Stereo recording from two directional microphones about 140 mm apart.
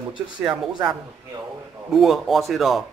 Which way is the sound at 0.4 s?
5° right (ahead or behind).